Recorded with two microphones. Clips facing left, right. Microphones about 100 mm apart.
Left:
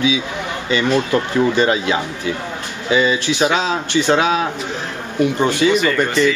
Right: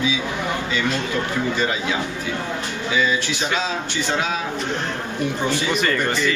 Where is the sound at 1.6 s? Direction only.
65° left (ahead or behind).